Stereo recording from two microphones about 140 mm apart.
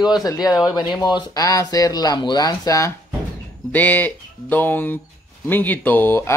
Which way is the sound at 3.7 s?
10° left (ahead or behind).